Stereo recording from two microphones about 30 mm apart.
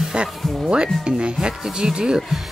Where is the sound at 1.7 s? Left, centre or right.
Right.